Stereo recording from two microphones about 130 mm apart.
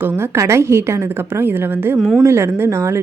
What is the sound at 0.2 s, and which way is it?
Speech, 20° right (ahead or behind).